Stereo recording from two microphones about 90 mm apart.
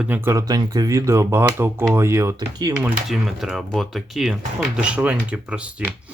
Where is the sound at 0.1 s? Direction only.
20° right (ahead or behind).